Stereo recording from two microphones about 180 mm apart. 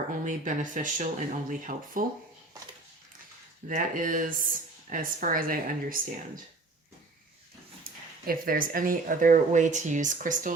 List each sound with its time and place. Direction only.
0.3 s speech: 45° right (ahead or behind)
3.8 s speech: 50° right (ahead or behind)
8.3 s speech: 50° right (ahead or behind)